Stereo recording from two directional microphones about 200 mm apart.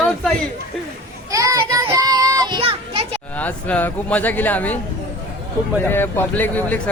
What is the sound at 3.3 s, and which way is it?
A man's voice, 5° left (ahead or behind).